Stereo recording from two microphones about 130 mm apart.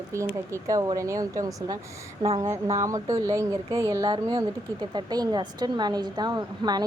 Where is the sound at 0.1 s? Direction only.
20° right (ahead or behind).